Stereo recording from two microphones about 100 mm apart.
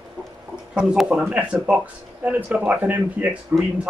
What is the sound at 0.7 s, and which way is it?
Speech, 5° right (ahead or behind).